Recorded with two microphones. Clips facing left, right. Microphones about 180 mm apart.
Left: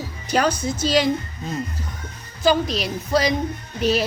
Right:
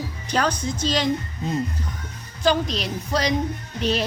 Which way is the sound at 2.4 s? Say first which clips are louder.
Left 2 dB; 5° left (ahead or behind).